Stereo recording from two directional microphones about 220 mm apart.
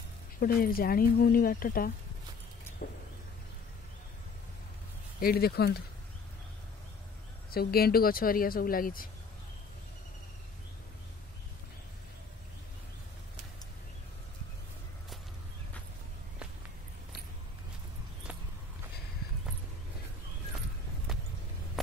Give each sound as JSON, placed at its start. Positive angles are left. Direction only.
{"t": 0.4, "sound": "speech", "side_deg": 40}
{"t": 5.2, "sound": "speech", "side_deg": 45}
{"t": 7.5, "sound": "speech", "side_deg": 45}